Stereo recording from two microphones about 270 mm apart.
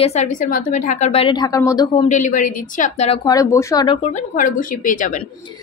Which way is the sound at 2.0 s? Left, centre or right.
Left.